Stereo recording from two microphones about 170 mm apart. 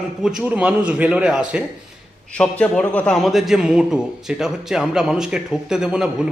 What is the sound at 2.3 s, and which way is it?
A man's voice, 5° left (ahead or behind).